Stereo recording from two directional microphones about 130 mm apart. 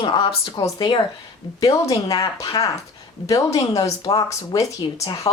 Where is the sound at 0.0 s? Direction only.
40° left (ahead or behind).